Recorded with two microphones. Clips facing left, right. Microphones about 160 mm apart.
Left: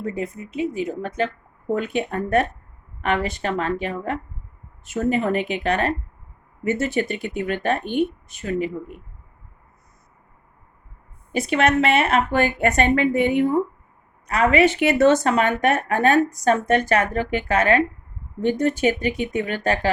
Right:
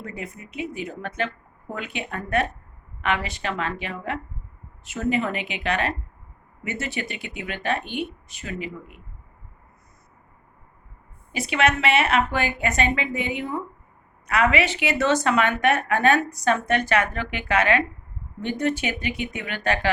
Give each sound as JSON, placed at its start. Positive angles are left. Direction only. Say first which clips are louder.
{"t": 0.0, "sound": "speech", "louder": "left 8 dB", "side_deg": 35}
{"t": 11.3, "sound": "speech", "louder": "left 3 dB", "side_deg": 50}